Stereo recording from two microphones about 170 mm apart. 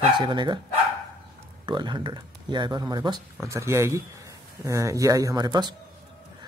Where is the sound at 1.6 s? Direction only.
25° right (ahead or behind).